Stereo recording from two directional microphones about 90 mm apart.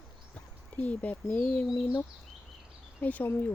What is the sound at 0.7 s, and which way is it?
Speech, 15° left (ahead or behind).